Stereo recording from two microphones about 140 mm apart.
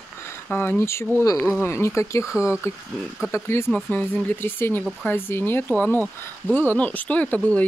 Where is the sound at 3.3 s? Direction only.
20° left (ahead or behind).